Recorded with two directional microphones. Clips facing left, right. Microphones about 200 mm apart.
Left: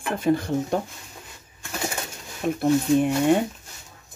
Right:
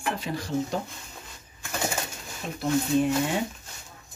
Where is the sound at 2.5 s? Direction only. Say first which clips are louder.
Left 4 dB; 55° left (ahead or behind).